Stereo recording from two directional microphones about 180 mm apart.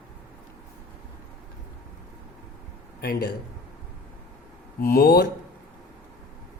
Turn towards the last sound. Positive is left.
turn(degrees=60)  # may be behind; listen again after turning